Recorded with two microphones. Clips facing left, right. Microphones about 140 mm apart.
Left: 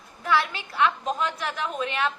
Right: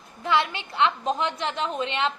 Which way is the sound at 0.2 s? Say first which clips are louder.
Right 1 dB; 20° right (ahead or behind).